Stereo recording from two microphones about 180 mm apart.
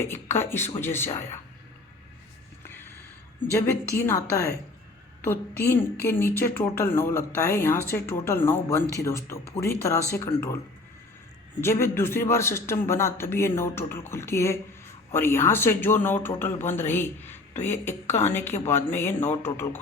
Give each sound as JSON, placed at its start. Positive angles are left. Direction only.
{"t": 0.0, "sound": "a woman's voice", "side_deg": 15}
{"t": 2.6, "sound": "a sound", "side_deg": 10}
{"t": 3.5, "sound": "a woman's voice", "side_deg": 15}
{"t": 11.6, "sound": "a woman's voice", "side_deg": 15}